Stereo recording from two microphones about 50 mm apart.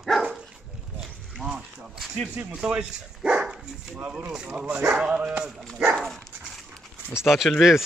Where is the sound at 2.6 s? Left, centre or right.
Centre.